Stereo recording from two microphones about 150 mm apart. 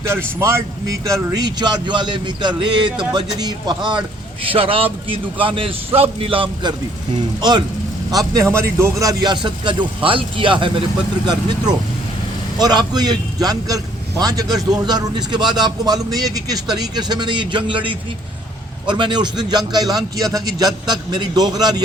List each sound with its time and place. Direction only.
0.3 s a man's voice: 20° right (ahead or behind)
8.1 s a man's voice: 25° right (ahead or behind)
12.5 s a man's voice: 25° right (ahead or behind)